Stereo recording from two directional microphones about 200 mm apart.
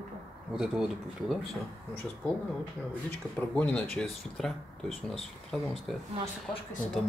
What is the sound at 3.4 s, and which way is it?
Speech, 10° left (ahead or behind).